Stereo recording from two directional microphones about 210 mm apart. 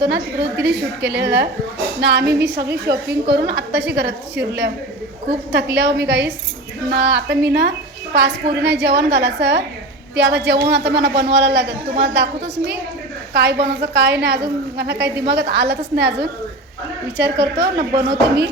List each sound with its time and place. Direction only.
0.0 s a woman's voice: 50° right (ahead or behind)
17.2 s a woman's voice: 55° right (ahead or behind)